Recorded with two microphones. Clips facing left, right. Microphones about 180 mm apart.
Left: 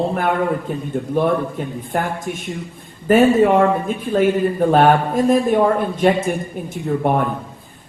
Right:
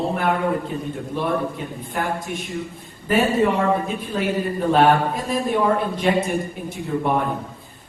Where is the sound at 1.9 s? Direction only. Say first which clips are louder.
Left 2 dB; 45° left (ahead or behind).